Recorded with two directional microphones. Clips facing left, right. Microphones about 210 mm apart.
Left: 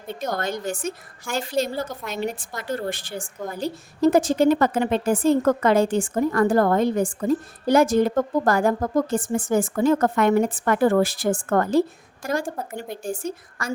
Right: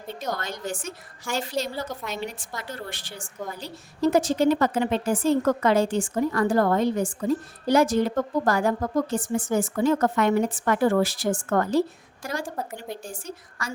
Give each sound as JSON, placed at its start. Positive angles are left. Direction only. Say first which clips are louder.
{"t": 0.2, "sound": "a woman's voice", "louder": "left 5 dB", "side_deg": 50}